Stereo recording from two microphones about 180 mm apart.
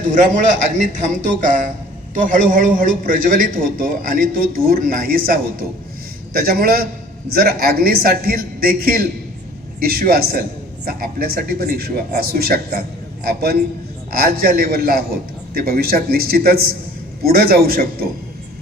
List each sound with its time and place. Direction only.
0.0 s a man's voice: 45° right (ahead or behind)